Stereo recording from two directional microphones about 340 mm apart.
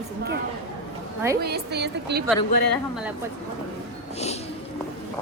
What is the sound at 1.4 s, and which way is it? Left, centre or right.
Speech, right.